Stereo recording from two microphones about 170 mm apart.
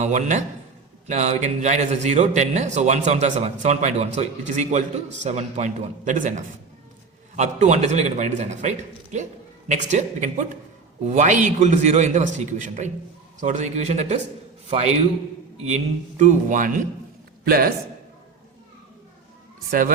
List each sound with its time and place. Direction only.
0.0 s a man's voice: 45° right (ahead or behind)